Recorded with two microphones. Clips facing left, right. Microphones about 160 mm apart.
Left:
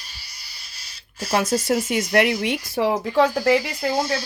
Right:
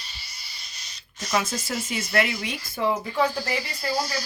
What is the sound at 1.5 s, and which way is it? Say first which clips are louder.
Speech: left 9 dB; 70° left (ahead or behind).